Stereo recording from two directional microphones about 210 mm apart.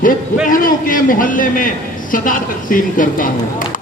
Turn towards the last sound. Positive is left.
turn(degrees=40)  # may be behind; listen again after turning